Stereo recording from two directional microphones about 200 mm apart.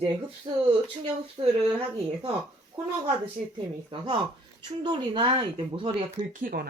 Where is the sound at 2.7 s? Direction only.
25° right (ahead or behind).